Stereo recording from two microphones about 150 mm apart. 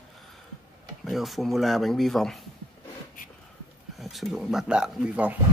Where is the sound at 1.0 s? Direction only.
Centre (ahead or behind).